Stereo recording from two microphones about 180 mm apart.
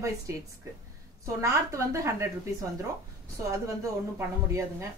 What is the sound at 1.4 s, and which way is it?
Speech, 15° right (ahead or behind).